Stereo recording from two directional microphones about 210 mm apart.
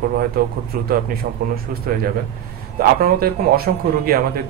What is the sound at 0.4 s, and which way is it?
A man's voice, 45° right (ahead or behind).